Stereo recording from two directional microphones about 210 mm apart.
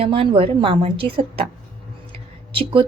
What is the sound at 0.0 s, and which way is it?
A woman's voice, 25° right (ahead or behind).